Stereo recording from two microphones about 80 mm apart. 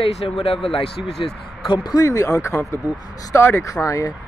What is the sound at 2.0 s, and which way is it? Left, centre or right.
A man's voice, left.